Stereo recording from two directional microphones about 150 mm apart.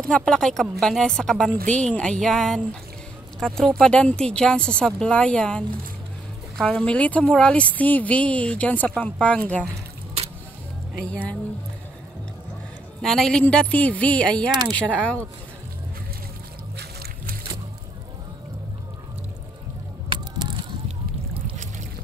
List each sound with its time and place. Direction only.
0.0 s speech: 5° left (ahead or behind)
6.6 s speech: 5° left (ahead or behind)
11.0 s speech: 5° left (ahead or behind)
13.0 s speech: centre (ahead or behind)
16.7 s boat: 90° right
20.1 s a sound: 30° right (ahead or behind)